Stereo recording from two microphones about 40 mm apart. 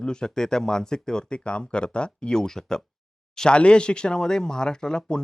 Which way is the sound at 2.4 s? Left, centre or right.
Centre.